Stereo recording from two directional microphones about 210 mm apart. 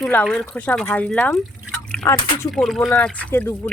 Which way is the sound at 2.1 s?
20° left (ahead or behind).